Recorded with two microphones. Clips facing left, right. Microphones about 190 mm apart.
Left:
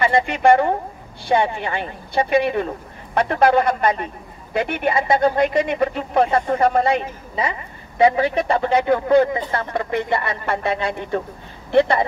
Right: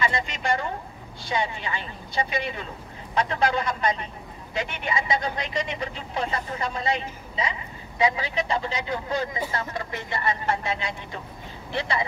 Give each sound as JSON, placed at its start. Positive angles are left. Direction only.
{"t": 0.0, "sound": "speech", "side_deg": 60}